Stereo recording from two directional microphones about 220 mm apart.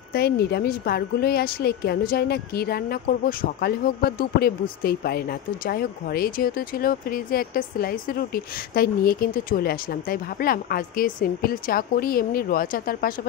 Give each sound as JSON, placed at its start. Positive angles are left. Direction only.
{"t": 0.1, "sound": "a woman's voice", "side_deg": 45}